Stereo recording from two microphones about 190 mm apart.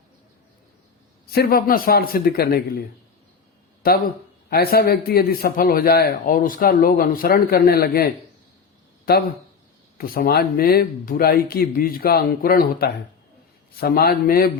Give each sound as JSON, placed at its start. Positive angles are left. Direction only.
{"t": 1.3, "sound": "a man's voice", "side_deg": 55}
{"t": 4.4, "sound": "a man's voice", "side_deg": 55}